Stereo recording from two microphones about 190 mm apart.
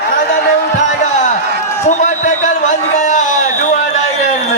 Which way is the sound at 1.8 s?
40° left (ahead or behind).